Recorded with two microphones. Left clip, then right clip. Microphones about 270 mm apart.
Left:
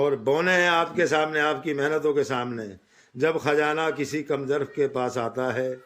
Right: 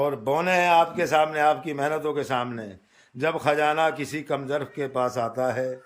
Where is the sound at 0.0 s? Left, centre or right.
Centre.